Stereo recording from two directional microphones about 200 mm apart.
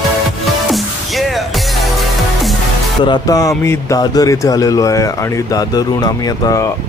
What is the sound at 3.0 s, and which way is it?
Speech, 20° left (ahead or behind).